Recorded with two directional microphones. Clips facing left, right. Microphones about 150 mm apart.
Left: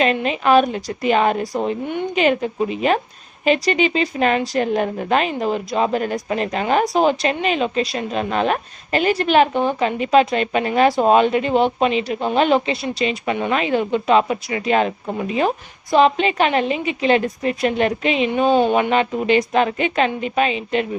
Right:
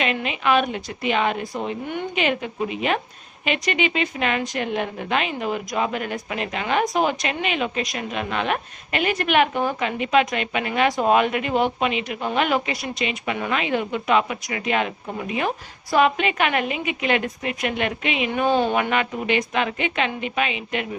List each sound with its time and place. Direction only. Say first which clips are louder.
0.0 s speech: left 6 dB; 35° left (ahead or behind)
18.3 s speech: left 4 dB; 20° left (ahead or behind)